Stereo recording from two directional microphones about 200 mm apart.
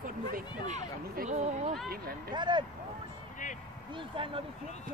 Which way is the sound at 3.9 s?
25° right (ahead or behind).